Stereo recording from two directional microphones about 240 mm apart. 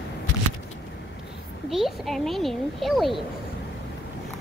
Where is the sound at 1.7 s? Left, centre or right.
Centre.